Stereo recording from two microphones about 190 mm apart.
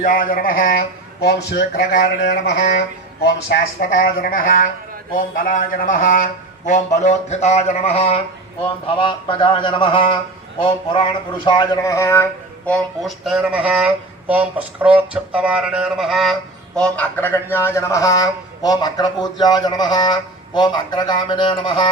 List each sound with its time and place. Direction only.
0.0 s a man's voice: 45° left (ahead or behind); by 21.8 s 25° left (ahead or behind)